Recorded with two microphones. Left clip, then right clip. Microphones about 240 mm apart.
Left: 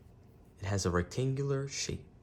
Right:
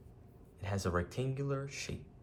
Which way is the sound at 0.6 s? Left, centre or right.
Left.